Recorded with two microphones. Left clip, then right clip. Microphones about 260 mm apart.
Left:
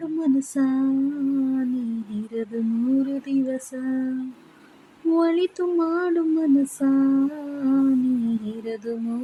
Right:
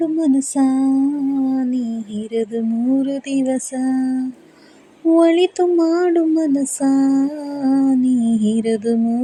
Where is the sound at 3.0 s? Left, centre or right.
Centre.